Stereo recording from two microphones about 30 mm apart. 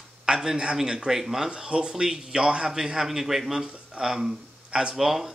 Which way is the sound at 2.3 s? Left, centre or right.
Right.